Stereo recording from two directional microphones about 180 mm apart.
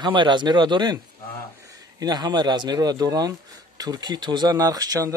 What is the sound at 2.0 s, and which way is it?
Speech, 20° right (ahead or behind).